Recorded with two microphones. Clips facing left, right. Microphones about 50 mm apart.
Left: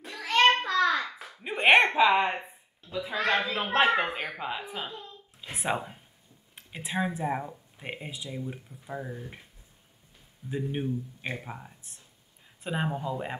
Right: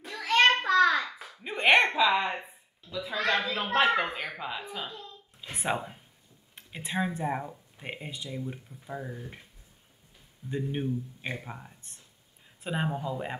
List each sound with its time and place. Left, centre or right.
0.4 s a sound: centre
2.0 s speech: left
5.4 s speech: centre
10.5 s speech: centre